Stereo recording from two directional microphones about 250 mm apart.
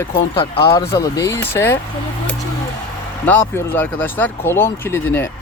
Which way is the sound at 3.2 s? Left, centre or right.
Centre.